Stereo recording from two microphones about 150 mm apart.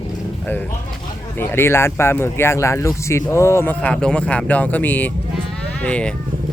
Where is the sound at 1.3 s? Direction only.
15° left (ahead or behind).